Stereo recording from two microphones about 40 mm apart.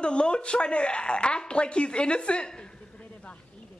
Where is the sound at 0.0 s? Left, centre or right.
Left.